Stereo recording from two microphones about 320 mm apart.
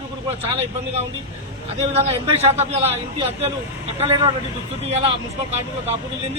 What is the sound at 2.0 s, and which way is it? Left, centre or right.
Speech, centre.